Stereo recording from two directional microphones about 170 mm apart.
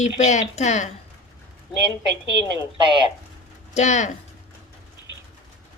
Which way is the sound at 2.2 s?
25° left (ahead or behind).